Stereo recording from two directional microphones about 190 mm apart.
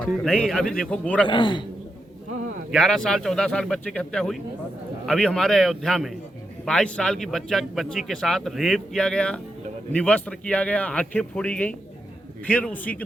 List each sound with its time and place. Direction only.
0.0 s speech: 5° left (ahead or behind)
1.3 s a man's voice: 25° left (ahead or behind)
2.7 s a man's voice: 5° left (ahead or behind)